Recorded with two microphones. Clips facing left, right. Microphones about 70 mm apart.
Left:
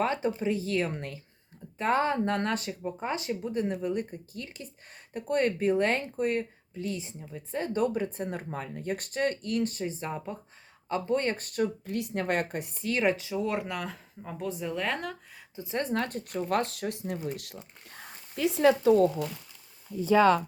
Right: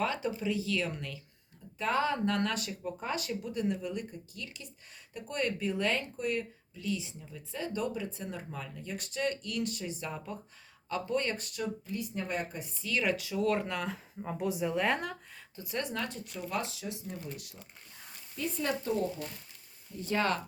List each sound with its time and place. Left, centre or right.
0.0 s speech: left
11.9 s speech: left; by 13.7 s centre
13.7 s speech: centre
15.5 s speech: left
17.8 s speech: left